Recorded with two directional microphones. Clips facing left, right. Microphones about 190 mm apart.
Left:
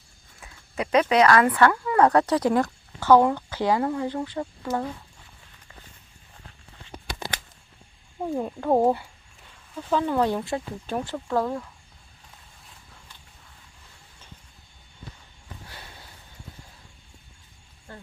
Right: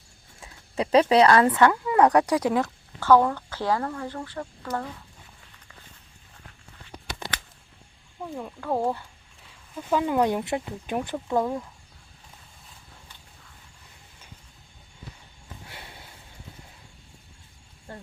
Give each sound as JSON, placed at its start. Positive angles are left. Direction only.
{"t": 0.3, "sound": "speech", "side_deg": -30}
{"t": 3.0, "sound": "speech", "side_deg": 15}
{"t": 8.2, "sound": "speech", "side_deg": 30}
{"t": 9.7, "sound": "speech", "side_deg": -10}
{"t": 15.7, "sound": "a sound", "side_deg": -25}